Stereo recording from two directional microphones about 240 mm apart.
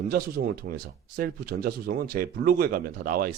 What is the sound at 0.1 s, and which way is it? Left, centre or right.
Speech, right.